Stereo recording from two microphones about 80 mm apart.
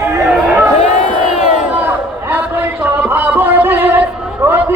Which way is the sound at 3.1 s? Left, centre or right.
Right.